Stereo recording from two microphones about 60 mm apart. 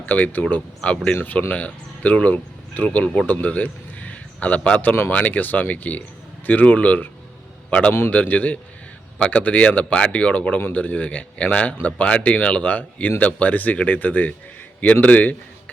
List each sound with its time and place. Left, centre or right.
0.0 s speech: left
0.8 s speech: centre
1.2 s speech: left